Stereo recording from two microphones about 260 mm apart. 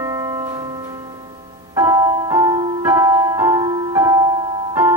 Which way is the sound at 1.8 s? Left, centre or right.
Centre.